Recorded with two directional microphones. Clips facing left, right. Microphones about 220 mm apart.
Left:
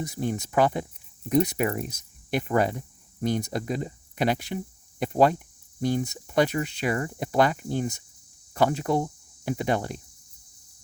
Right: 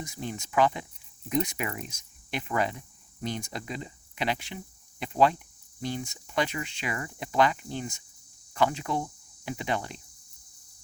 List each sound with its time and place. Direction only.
0.0 s speech: 40° left (ahead or behind)